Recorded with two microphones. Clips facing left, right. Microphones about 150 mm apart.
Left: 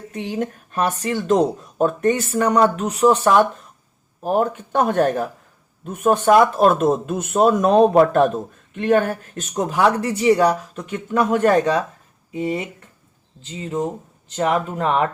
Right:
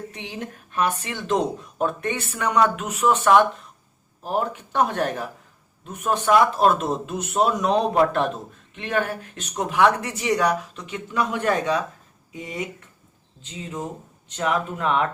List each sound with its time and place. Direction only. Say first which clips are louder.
0.1 s speech: left 9 dB; 45° left (ahead or behind)
4.2 s speech: left 6 dB; 50° left (ahead or behind); by 10.5 s 30° left (ahead or behind)
10.8 s speech: left 5 dB; 50° left (ahead or behind); by 12.6 s 30° left (ahead or behind)
13.4 s speech: left 5 dB; 5° right (ahead or behind)
14.3 s speech: left 4 dB; 35° left (ahead or behind)